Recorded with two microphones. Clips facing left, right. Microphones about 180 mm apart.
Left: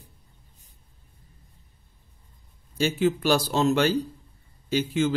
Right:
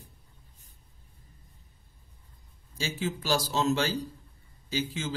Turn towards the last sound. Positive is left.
turn(degrees=60)  # may be behind; listen again after turning